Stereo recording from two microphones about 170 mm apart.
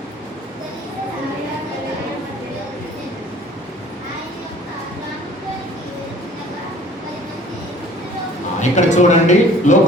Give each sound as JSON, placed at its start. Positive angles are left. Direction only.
{"t": 8.7, "sound": "speech", "side_deg": 45}